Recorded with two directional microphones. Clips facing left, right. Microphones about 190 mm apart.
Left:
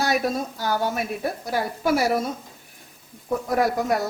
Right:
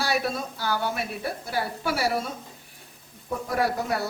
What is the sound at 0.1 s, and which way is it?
Speech, 45° left (ahead or behind).